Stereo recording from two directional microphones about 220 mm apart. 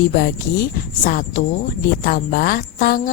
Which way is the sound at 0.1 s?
40° left (ahead or behind).